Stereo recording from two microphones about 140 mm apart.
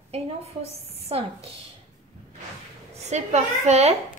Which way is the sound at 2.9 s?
55° right (ahead or behind).